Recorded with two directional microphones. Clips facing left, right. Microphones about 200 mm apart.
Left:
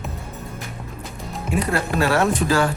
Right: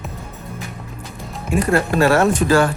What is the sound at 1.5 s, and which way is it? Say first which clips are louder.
Speech: right 5 dB; 45° right (ahead or behind).